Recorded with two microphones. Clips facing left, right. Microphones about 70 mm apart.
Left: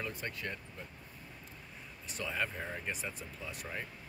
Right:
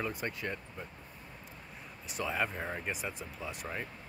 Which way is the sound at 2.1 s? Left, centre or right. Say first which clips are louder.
Right 3 dB; centre.